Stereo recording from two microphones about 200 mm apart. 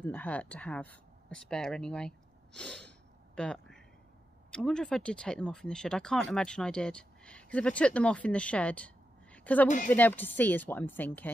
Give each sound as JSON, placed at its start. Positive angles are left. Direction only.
{"t": 0.0, "sound": "speech", "side_deg": 10}
{"t": 3.3, "sound": "a sound", "side_deg": 5}
{"t": 4.5, "sound": "speech", "side_deg": 5}
{"t": 9.7, "sound": "speech", "side_deg": 40}
{"t": 9.9, "sound": "speech", "side_deg": 10}